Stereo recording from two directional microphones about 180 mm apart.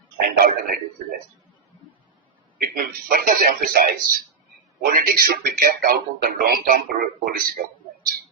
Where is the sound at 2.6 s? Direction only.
55° right (ahead or behind).